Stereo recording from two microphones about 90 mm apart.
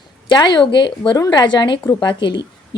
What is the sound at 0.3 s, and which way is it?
A woman's voice, 55° left (ahead or behind).